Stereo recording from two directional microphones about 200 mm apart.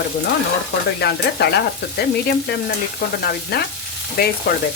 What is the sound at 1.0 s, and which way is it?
Stir, 55° left (ahead or behind).